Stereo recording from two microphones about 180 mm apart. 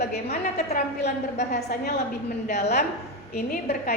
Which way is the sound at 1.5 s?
60° left (ahead or behind).